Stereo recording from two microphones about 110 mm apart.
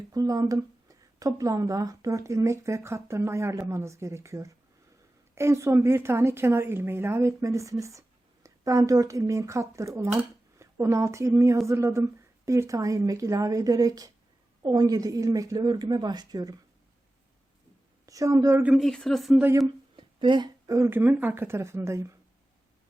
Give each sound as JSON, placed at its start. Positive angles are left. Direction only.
{"t": 0.1, "sound": "a woman's voice", "side_deg": -35}
{"t": 18.0, "sound": "a woman's voice", "side_deg": -30}
{"t": 18.8, "sound": "speech", "side_deg": 5}
{"t": 20.0, "sound": "a sound", "side_deg": -45}
{"t": 20.7, "sound": "speech", "side_deg": -25}